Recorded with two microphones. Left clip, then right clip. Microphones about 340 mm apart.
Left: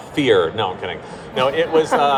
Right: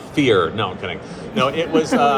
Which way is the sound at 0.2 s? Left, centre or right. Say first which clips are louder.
Left 1 dB; left.